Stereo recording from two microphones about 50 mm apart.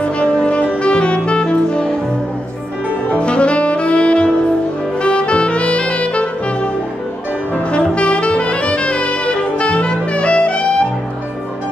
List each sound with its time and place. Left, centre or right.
0.0 s music: left
3.2 s saxophone: left
5.0 s brass instrument: left
7.7 s brass instrument: left